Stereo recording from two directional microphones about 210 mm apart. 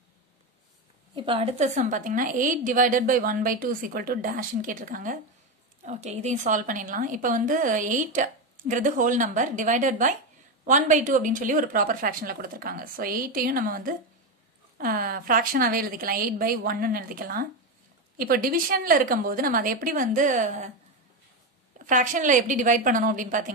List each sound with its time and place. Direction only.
1.1 s a woman's voice: 25° right (ahead or behind)
21.7 s a woman's voice: 40° right (ahead or behind)